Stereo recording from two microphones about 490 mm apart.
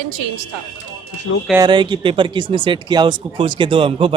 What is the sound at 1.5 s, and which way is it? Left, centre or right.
Speech, centre.